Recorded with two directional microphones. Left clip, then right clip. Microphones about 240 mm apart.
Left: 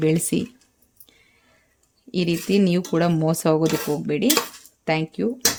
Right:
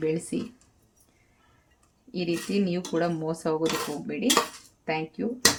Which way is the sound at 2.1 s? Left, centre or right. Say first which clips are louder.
Left 7 dB; left.